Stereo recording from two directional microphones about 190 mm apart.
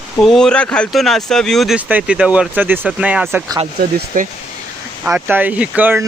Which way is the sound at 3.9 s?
45° right (ahead or behind).